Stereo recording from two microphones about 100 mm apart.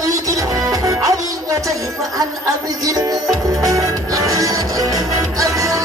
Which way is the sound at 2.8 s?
35° right (ahead or behind).